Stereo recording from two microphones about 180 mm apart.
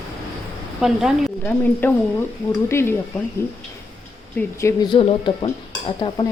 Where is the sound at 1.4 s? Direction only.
10° left (ahead or behind).